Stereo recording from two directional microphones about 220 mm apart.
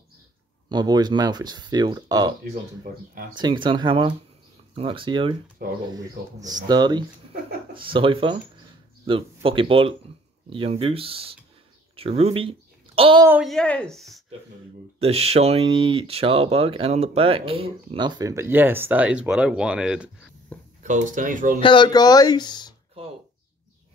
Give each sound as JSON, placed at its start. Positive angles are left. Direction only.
{"t": 0.7, "sound": "speech", "side_deg": -20}
{"t": 3.3, "sound": "speech", "side_deg": -20}
{"t": 13.3, "sound": "a woman's voice", "side_deg": 0}
{"t": 15.0, "sound": "speech", "side_deg": -25}
{"t": 20.5, "sound": "a sound", "side_deg": 5}
{"t": 20.8, "sound": "speech", "side_deg": -35}
{"t": 21.5, "sound": "speech", "side_deg": 20}